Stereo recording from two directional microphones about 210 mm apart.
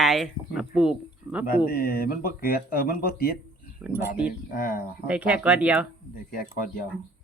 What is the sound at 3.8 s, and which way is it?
Speech, 10° right (ahead or behind).